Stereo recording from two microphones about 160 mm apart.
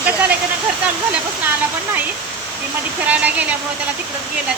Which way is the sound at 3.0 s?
10° right (ahead or behind).